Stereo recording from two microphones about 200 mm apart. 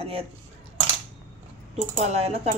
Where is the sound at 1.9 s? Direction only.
35° right (ahead or behind).